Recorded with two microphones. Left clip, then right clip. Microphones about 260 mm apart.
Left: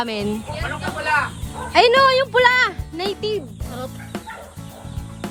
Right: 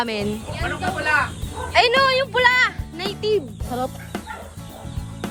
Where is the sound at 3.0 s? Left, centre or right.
Left.